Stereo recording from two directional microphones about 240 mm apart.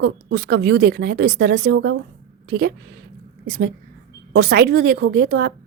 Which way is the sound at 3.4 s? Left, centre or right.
Right.